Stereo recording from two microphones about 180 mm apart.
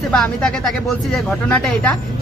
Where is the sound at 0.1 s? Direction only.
5° left (ahead or behind).